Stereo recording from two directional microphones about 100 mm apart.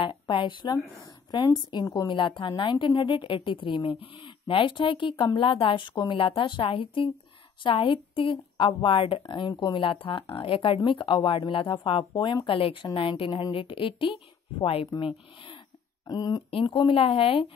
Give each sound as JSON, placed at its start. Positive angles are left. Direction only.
{"t": 0.0, "sound": "a sound", "side_deg": 55}
{"t": 0.9, "sound": "a woman's voice", "side_deg": 50}
{"t": 9.3, "sound": "a woman's voice", "side_deg": 50}
{"t": 9.8, "sound": "a woman's voice", "side_deg": 65}
{"t": 16.1, "sound": "speech", "side_deg": 40}
{"t": 16.6, "sound": "a woman's voice", "side_deg": 60}